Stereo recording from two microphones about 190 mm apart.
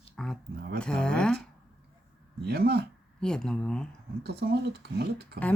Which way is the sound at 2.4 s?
55° right (ahead or behind).